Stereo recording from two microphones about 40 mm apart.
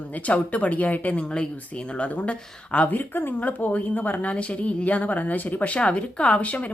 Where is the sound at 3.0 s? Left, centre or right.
Left.